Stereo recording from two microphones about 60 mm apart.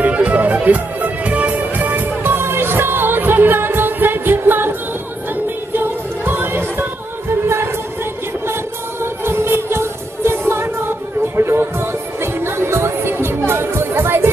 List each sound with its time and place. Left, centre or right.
0.0 s music: right
9.0 s music: right